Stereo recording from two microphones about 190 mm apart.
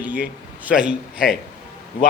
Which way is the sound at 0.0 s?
10° right (ahead or behind).